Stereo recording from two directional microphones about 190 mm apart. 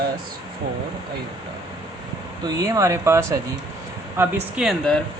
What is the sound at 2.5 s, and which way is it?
Speech, 15° right (ahead or behind).